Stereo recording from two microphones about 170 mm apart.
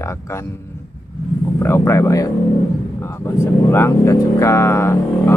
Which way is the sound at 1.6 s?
15° left (ahead or behind).